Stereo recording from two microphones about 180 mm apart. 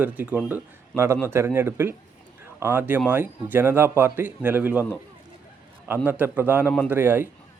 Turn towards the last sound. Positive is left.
turn(degrees=-10)  # may be behind; listen again after turning